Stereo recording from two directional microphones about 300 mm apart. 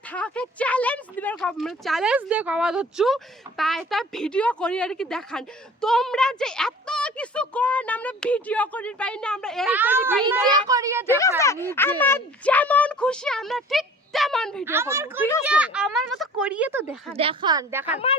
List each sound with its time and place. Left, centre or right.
0.1 s a woman's voice: centre
11.2 s a woman's voice: centre
17.2 s speech: centre
17.8 s a woman's voice: centre